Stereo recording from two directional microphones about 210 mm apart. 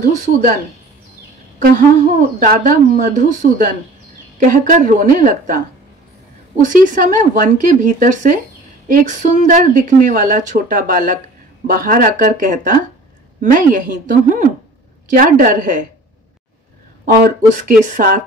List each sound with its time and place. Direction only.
0.1 s speech: 35° right (ahead or behind)
2.4 s speech: 40° right (ahead or behind)
17.0 s speech: 40° right (ahead or behind)